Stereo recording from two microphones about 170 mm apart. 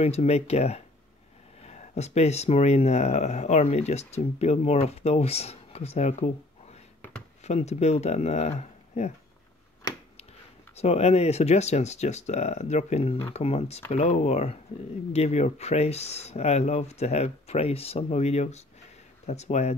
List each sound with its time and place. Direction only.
0.0 s speech: 40° left (ahead or behind)
7.0 s a sound: 5° left (ahead or behind)
7.4 s speech: 40° left (ahead or behind)
10.8 s speech: 35° left (ahead or behind)